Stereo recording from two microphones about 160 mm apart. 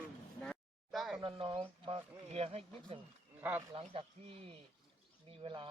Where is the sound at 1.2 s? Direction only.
35° right (ahead or behind).